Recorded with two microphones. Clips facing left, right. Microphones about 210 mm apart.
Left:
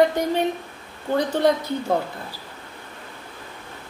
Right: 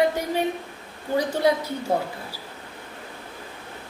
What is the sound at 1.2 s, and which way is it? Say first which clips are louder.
Speech: left 2 dB; 10° right (ahead or behind).